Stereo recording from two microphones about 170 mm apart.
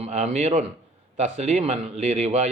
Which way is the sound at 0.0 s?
40° right (ahead or behind).